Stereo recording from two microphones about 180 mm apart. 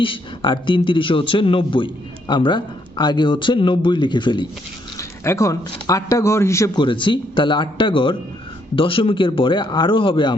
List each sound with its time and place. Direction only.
0.0 s speech: 30° left (ahead or behind)
6.8 s speech: 25° left (ahead or behind)